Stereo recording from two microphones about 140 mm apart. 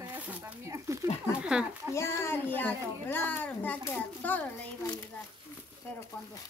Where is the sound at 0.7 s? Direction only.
20° right (ahead or behind).